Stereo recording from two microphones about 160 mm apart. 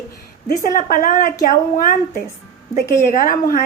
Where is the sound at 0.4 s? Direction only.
60° left (ahead or behind).